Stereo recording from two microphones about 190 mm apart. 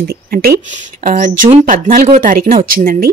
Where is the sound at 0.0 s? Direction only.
55° right (ahead or behind).